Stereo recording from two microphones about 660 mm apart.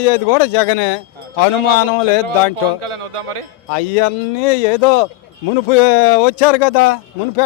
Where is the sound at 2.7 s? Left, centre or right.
Right.